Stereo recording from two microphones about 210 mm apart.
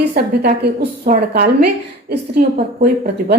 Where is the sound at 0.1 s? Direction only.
50° right (ahead or behind).